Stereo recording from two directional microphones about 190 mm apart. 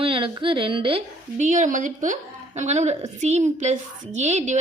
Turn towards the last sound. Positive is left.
turn(degrees=-35)  # may be behind; listen again after turning